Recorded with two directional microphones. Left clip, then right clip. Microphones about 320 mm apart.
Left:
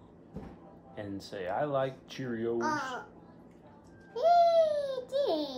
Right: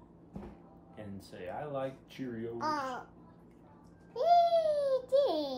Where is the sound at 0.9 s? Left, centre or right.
Centre.